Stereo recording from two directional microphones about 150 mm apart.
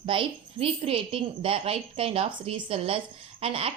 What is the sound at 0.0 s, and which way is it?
A child's voice, 35° right (ahead or behind).